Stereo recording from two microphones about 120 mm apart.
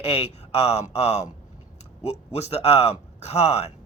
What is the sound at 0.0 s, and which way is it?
Speech, 60° left (ahead or behind).